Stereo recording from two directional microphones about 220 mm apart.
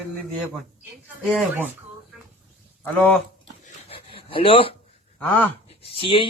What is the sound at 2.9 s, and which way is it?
Speech, 5° left (ahead or behind).